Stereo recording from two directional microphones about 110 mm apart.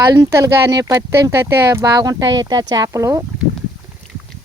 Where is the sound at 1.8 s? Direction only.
35° right (ahead or behind).